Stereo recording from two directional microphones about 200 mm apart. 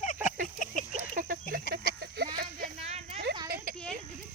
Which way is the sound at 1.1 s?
45° right (ahead or behind).